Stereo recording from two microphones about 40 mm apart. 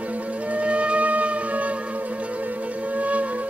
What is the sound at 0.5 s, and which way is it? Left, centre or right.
Music, right.